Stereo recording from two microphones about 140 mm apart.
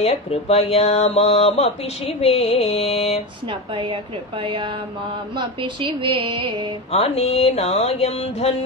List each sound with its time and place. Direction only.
0.0 s speech: 45° left (ahead or behind)
3.7 s music: 35° right (ahead or behind)
6.9 s speech: 50° left (ahead or behind)